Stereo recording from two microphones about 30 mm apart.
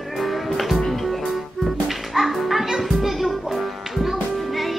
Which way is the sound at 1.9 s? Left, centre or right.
Centre.